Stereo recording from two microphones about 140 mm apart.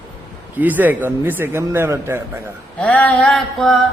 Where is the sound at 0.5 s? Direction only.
10° right (ahead or behind).